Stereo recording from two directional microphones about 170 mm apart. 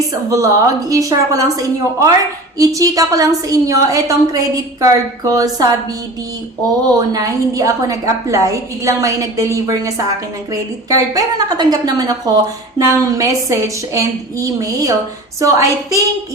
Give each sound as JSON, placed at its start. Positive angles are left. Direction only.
{"t": 0.1, "sound": "a woman's voice", "side_deg": -20}
{"t": 6.8, "sound": "a woman's voice", "side_deg": -20}